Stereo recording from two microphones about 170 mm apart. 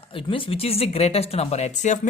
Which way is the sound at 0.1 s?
30° left (ahead or behind).